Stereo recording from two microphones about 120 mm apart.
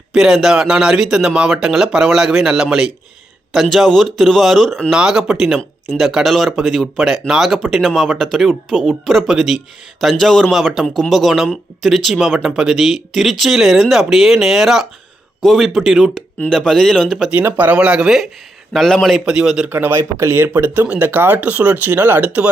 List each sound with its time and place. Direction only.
0.1 s speech: 5° right (ahead or behind)
17.3 s a man's voice: 15° right (ahead or behind)